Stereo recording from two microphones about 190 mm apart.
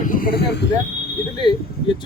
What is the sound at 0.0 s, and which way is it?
Speech, 45° left (ahead or behind).